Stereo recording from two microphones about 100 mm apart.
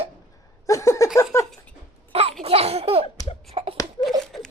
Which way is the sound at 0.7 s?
30° left (ahead or behind).